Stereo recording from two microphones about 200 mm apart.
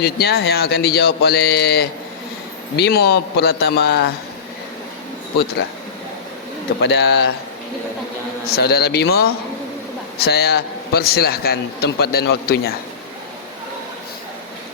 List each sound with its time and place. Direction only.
0.0 s a man's voice: 50° left (ahead or behind)
6.8 s speech: 55° left (ahead or behind)
8.4 s a man's voice: 50° left (ahead or behind)